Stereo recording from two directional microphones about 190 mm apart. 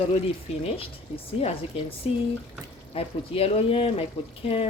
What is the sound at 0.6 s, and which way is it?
Speech, 30° left (ahead or behind).